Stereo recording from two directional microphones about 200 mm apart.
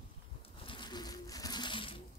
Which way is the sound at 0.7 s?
20° left (ahead or behind).